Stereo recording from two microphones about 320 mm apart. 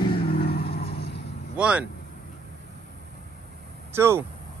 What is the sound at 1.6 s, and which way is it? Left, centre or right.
Speech, centre.